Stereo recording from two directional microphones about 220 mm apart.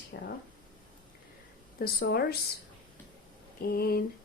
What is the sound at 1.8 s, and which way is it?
Speech, 45° left (ahead or behind).